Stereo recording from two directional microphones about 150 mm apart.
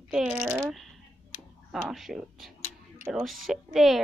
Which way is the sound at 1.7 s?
Centre (ahead or behind).